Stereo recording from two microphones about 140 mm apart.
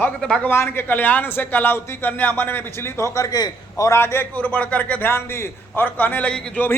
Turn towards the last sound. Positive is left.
turn(degrees=10)  # may be behind; listen again after turning